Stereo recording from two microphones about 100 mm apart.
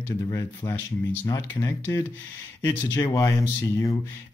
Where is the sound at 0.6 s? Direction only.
45° left (ahead or behind).